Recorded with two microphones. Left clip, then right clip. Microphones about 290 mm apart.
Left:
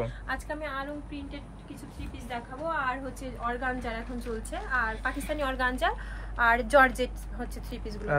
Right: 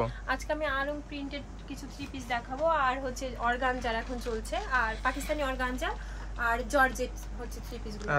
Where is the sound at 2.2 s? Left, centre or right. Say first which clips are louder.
Right 5 dB; right; by 5.9 s centre.